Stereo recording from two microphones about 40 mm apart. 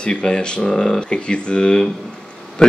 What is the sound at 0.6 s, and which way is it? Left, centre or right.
Speech, centre.